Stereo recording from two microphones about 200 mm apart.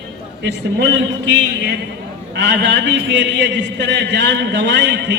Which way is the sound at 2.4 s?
60° right (ahead or behind).